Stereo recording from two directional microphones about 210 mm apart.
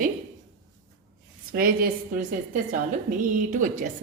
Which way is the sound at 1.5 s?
45° right (ahead or behind).